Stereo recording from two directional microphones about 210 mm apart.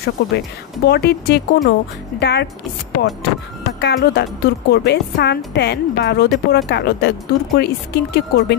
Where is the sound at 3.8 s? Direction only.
50° left (ahead or behind).